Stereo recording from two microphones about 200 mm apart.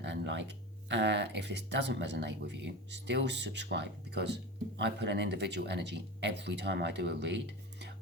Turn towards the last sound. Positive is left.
turn(degrees=-60)  # may be behind; listen again after turning